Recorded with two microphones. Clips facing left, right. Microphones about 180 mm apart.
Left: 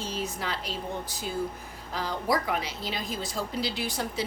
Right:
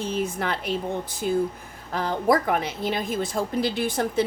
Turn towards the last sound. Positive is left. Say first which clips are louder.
# right 8 dB
turn(degrees=-55)  # may be behind; listen again after turning